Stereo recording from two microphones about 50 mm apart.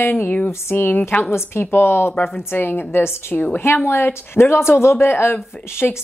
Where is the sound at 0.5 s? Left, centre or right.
Left.